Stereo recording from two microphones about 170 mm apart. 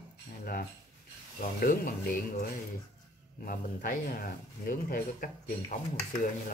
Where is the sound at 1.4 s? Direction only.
55° left (ahead or behind).